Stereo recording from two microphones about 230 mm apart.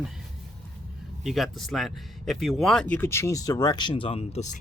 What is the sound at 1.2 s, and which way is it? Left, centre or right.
Speech, centre.